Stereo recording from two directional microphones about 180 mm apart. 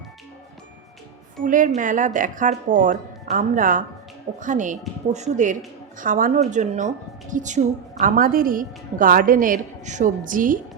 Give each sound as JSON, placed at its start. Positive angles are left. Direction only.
{"t": 1.5, "sound": "a woman's voice", "side_deg": -45}